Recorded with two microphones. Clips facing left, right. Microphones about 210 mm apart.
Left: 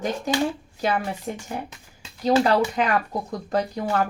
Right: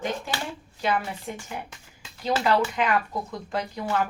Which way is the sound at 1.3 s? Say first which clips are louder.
Left 4 dB; 40° left (ahead or behind).